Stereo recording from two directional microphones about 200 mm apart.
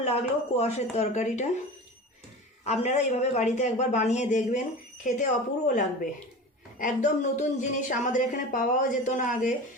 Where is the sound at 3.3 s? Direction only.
35° left (ahead or behind).